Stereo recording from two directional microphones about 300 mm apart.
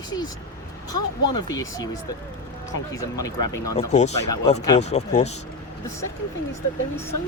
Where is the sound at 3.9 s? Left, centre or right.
Left.